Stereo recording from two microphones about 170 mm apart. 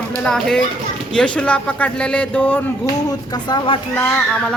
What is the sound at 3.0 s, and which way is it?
Speech, 20° left (ahead or behind).